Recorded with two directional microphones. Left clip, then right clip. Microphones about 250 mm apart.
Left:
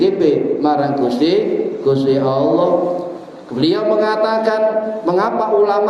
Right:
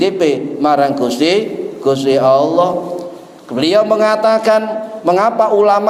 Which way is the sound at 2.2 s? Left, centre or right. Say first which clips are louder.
Right 4 dB; right.